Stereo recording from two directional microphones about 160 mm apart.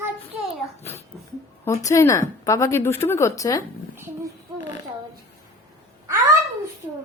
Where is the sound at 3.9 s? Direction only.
15° right (ahead or behind).